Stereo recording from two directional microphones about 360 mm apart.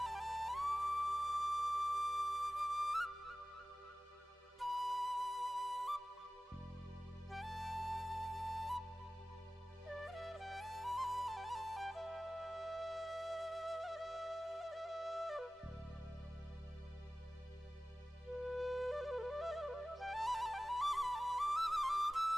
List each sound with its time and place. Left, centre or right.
0.0 s flute: centre
4.6 s flute: centre
7.3 s music: centre
9.8 s flute: centre
18.4 s flute: centre